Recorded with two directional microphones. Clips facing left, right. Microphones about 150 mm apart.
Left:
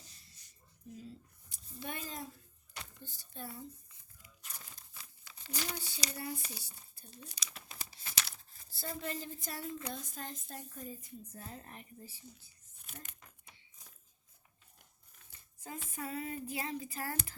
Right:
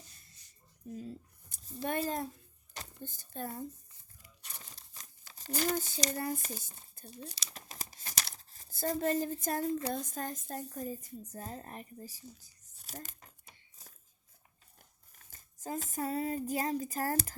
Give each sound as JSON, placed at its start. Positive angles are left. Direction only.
{"t": 0.9, "sound": "speech", "side_deg": -50}
{"t": 2.7, "sound": "a sound", "side_deg": -45}
{"t": 4.6, "sound": "crumpling", "side_deg": -40}
{"t": 7.2, "sound": "tearing", "side_deg": -35}
{"t": 9.9, "sound": "a woman's voice", "side_deg": -45}
{"t": 15.1, "sound": "speech", "side_deg": -40}